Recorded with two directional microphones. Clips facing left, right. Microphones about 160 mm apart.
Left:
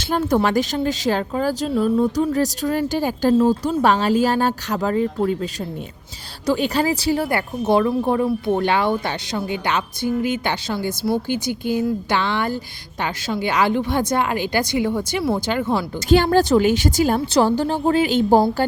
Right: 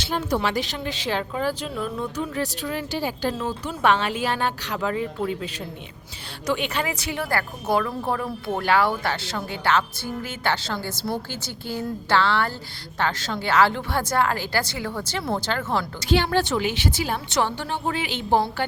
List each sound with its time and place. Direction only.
0.0 s speech: 50° left (ahead or behind)
3.3 s speech: 35° left (ahead or behind)
6.5 s speech: 35° left (ahead or behind); by 15.2 s 15° left (ahead or behind)
15.2 s speech: 5° left (ahead or behind)
16.0 s speech: 45° left (ahead or behind)